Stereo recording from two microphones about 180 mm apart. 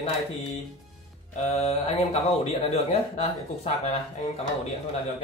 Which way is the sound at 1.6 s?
35° left (ahead or behind).